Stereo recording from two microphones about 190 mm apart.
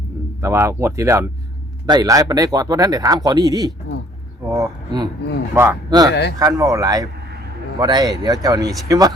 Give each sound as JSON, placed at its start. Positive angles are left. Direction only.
{"t": 0.4, "sound": "speech", "side_deg": -15}